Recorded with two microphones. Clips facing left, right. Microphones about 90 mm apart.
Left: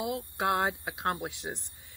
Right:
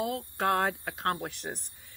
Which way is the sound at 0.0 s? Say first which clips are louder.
Right 1 dB; 20° left (ahead or behind).